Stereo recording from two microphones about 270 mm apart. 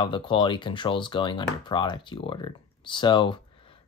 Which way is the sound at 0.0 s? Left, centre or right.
Centre.